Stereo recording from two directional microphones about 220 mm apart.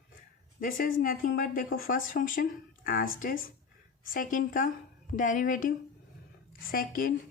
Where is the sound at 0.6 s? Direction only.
40° left (ahead or behind).